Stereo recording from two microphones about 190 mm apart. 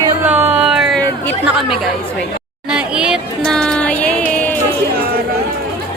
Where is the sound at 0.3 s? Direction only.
10° right (ahead or behind).